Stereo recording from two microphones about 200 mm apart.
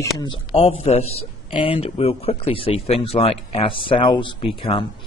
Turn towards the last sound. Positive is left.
turn(degrees=25)  # may be behind; listen again after turning